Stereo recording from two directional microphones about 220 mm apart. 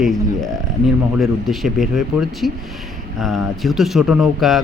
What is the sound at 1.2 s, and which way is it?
Speech, centre (ahead or behind).